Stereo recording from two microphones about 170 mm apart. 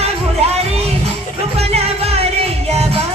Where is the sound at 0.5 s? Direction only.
40° right (ahead or behind).